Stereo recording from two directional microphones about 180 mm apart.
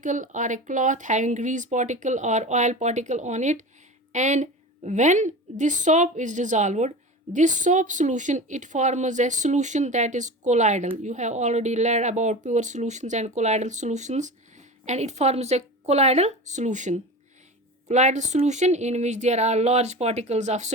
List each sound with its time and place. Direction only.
0.0 s speech: 45° right (ahead or behind)